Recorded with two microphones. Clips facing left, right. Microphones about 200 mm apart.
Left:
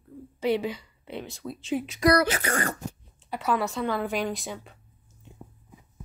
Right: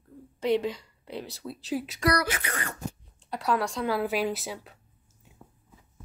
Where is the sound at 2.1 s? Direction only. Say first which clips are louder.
Left 5 dB; 30° left (ahead or behind).